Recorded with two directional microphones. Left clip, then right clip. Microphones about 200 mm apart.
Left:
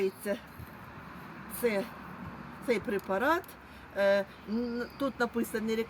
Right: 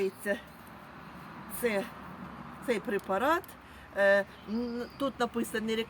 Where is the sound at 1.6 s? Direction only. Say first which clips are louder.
Even; 15° left (ahead or behind).